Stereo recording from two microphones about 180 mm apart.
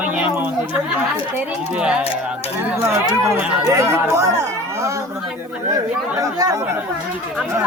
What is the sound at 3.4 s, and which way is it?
Speech, 15° right (ahead or behind).